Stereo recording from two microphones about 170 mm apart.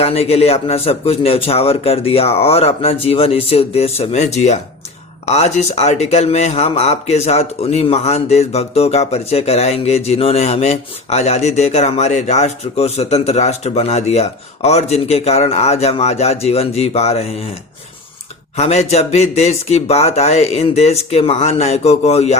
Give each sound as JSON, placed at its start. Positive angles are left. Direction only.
{"t": 0.0, "sound": "speech", "side_deg": 35}
{"t": 18.5, "sound": "speech", "side_deg": 40}